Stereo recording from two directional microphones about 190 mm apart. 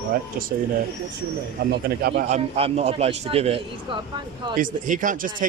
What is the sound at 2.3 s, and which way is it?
Speech, 35° right (ahead or behind).